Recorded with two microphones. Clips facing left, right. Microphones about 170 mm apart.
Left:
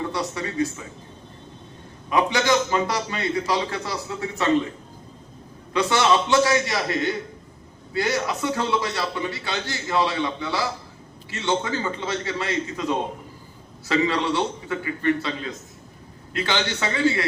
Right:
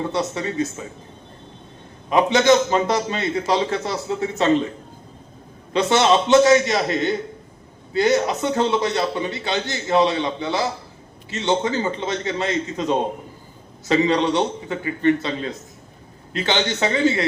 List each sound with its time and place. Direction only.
0.1 s a man's voice: 20° right (ahead or behind)
2.0 s a man's voice: 20° right (ahead or behind)
5.7 s a man's voice: 25° right (ahead or behind)